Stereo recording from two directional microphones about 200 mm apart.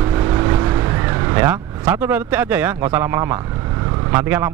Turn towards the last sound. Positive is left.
turn(degrees=-15)  # may be behind; listen again after turning